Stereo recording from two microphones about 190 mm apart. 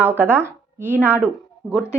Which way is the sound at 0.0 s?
10° right (ahead or behind).